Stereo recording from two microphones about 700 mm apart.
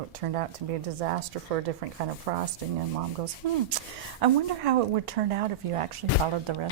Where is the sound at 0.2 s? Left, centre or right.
Right.